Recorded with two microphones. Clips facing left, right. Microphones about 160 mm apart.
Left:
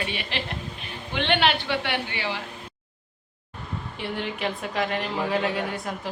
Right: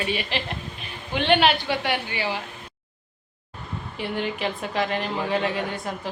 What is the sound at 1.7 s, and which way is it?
Speech, 40° right (ahead or behind).